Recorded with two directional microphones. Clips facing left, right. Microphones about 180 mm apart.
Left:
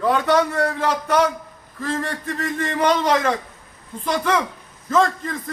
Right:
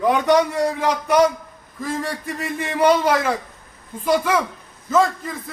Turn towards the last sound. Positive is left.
turn(degrees=-5)  # may be behind; listen again after turning